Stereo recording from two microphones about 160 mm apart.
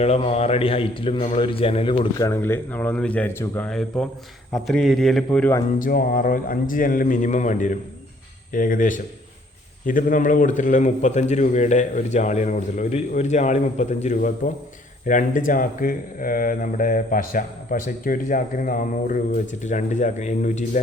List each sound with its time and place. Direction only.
0.0 s speech: 40° left (ahead or behind)
2.1 s speech: 15° left (ahead or behind)
3.7 s a man's voice: 5° left (ahead or behind)
5.8 s speech: 65° left (ahead or behind); by 20.7 s 50° left (ahead or behind)